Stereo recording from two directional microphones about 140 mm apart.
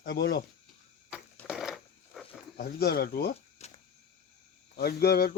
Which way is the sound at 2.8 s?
90° left.